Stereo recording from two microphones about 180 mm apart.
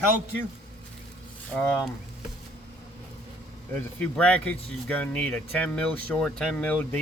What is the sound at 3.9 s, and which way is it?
Speech, 5° left (ahead or behind).